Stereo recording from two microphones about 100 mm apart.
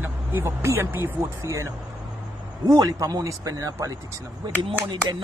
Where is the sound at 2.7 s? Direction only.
35° right (ahead or behind).